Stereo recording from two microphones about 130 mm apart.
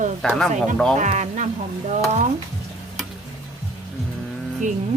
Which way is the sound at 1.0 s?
75° right (ahead or behind).